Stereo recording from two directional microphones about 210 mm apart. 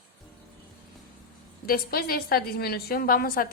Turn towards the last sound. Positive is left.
turn(degrees=45)  # may be behind; listen again after turning